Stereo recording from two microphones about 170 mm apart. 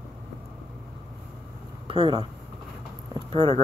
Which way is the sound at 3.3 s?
35° right (ahead or behind).